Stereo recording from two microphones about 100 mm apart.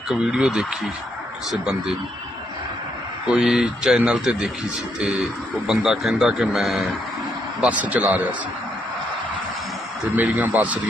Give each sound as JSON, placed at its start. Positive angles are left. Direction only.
{"t": 0.1, "sound": "a man's voice", "side_deg": -5}
{"t": 3.2, "sound": "a man's voice", "side_deg": -5}
{"t": 10.2, "sound": "speech", "side_deg": -15}